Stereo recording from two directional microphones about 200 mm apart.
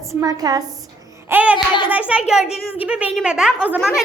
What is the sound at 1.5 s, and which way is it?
Speech, 25° left (ahead or behind).